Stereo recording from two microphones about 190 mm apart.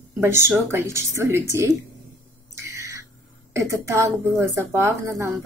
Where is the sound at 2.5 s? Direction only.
15° right (ahead or behind).